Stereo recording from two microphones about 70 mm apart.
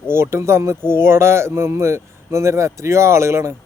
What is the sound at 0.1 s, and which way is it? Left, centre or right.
Speech, right.